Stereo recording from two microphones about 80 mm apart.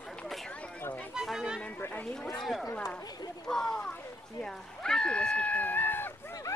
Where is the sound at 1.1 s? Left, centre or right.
Centre.